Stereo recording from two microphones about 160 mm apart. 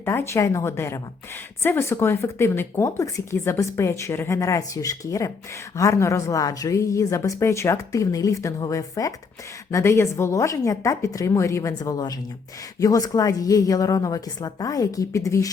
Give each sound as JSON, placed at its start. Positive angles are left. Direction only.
{"t": 0.0, "sound": "a woman's voice", "side_deg": 15}